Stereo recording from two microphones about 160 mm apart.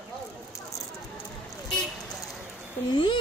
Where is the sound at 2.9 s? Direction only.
30° left (ahead or behind).